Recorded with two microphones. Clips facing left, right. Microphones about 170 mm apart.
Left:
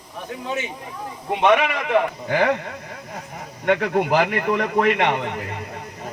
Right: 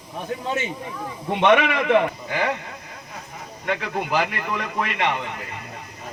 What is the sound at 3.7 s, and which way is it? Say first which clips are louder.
A man's voice: left 6 dB; 55° left (ahead or behind).